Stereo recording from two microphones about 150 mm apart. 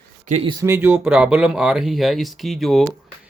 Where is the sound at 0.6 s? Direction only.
15° right (ahead or behind); by 2.9 s centre (ahead or behind).